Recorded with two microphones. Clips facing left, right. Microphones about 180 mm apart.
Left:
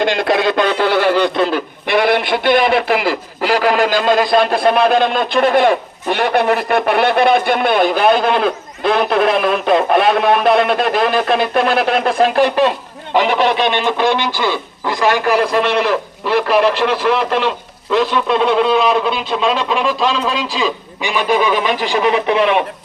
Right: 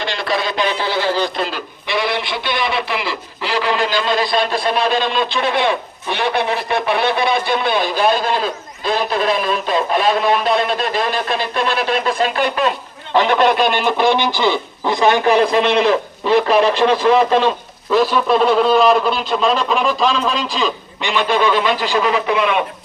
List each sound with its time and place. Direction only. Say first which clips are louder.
0.0 s a man's voice: left 6 dB; 55° left (ahead or behind)
13.1 s speech: even; 5° left (ahead or behind); by 16.9 s 15° right (ahead or behind)
17.9 s a man's voice: right 1 dB; 5° right (ahead or behind); by 22.5 s 20° left (ahead or behind)